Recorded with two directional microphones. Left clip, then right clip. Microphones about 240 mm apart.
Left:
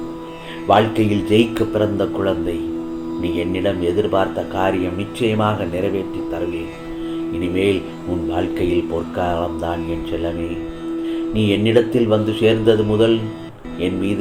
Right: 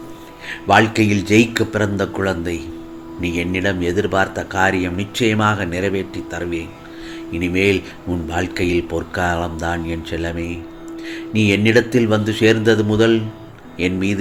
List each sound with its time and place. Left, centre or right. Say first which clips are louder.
0.7 s speech: right 1 dB; right
7.3 s speech: right 2 dB; right
11.4 s speech: right 1 dB; right